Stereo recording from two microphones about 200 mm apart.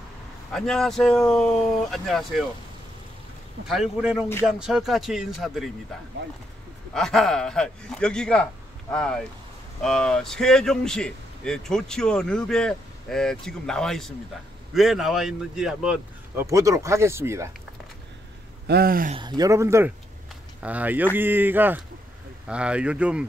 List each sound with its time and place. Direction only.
0.5 s speech: centre (ahead or behind)
3.6 s speech: centre (ahead or behind)
6.9 s speech: centre (ahead or behind)
16.4 s speech: 15° right (ahead or behind)
18.7 s a sound: 50° right (ahead or behind)
19.1 s speech: 20° right (ahead or behind); by 23.2 s 5° right (ahead or behind)